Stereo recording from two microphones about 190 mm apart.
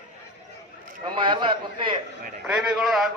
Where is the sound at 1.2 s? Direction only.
25° right (ahead or behind).